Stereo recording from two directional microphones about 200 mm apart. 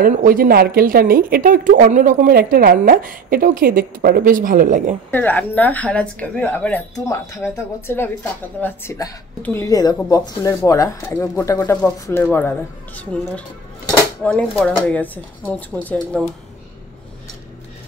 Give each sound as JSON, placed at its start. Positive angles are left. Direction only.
{"t": 0.0, "sound": "speech", "side_deg": -45}
{"t": 5.1, "sound": "speech", "side_deg": 10}
{"t": 13.8, "sound": "dishes", "side_deg": 5}
{"t": 14.6, "sound": "speech", "side_deg": 5}